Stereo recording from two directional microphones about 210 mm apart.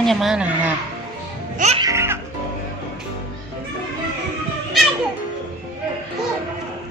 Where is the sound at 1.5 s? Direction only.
30° right (ahead or behind).